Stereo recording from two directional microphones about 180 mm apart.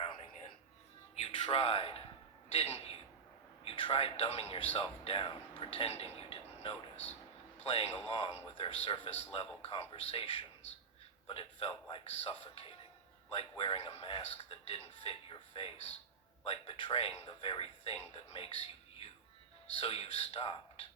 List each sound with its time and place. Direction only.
1.1 s a man's voice: 35° left (ahead or behind)
19.7 s speech: 35° left (ahead or behind)